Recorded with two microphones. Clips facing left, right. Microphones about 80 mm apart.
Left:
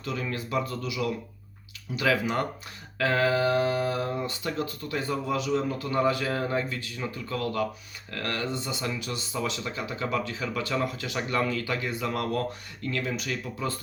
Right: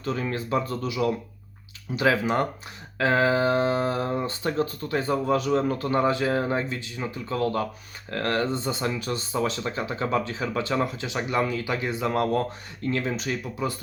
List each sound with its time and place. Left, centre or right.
0.0 s speech: right
6.0 s speech: right
13.4 s speech: centre